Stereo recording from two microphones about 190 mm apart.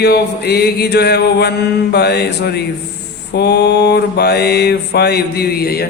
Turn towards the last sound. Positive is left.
turn(degrees=55)  # may be behind; listen again after turning